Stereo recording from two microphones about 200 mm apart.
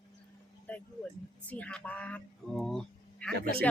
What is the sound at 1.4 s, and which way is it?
Speech, 5° left (ahead or behind).